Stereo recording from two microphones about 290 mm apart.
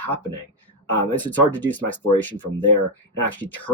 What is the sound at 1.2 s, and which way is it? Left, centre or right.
Speech, centre.